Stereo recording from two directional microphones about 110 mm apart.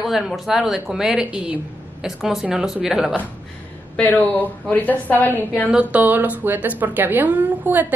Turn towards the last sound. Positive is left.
turn(degrees=-15)  # may be behind; listen again after turning